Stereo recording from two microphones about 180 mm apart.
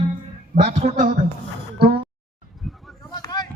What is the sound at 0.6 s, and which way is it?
Speech, 35° right (ahead or behind).